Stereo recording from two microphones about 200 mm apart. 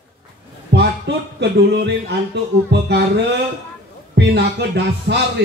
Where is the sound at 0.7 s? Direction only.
55° right (ahead or behind).